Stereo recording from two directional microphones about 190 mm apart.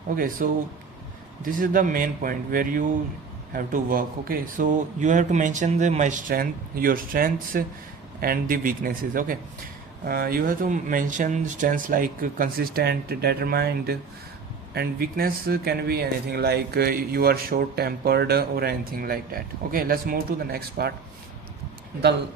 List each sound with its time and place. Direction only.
0.2 s speech: 45° right (ahead or behind)